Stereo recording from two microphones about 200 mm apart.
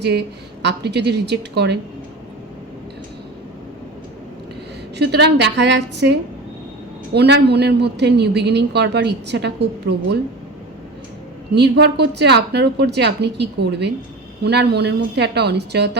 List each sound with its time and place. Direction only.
0.0 s a woman's voice: 55° right (ahead or behind)
4.9 s a woman's voice: 55° right (ahead or behind)
11.5 s a woman's voice: 55° right (ahead or behind)